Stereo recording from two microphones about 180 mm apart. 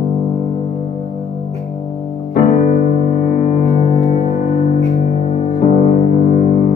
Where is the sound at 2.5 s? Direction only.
35° left (ahead or behind).